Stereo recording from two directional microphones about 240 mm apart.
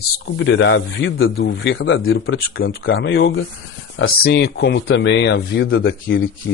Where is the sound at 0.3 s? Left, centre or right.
Left.